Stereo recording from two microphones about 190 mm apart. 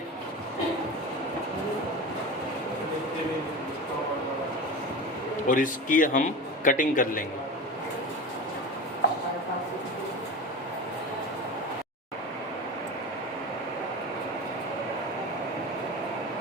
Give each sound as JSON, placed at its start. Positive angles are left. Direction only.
{"t": 5.5, "sound": "a man's voice", "side_deg": 45}